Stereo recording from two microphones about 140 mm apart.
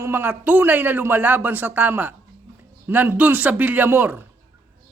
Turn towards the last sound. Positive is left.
turn(degrees=-15)  # may be behind; listen again after turning